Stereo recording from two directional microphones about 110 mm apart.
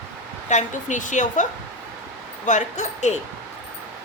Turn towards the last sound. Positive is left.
turn(degrees=90)